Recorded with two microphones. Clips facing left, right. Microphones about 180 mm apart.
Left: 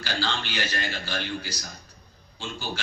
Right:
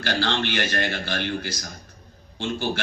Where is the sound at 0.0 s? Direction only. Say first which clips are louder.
Right 6 dB; 60° right (ahead or behind).